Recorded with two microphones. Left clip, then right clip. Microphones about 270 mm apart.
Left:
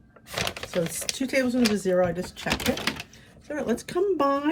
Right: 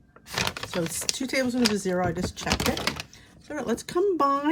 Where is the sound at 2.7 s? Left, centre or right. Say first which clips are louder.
Left 1 dB; right.